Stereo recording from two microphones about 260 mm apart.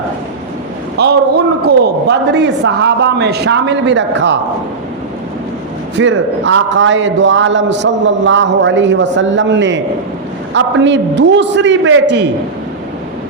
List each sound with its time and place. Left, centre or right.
1.0 s a man's voice: right
6.0 s a man's voice: right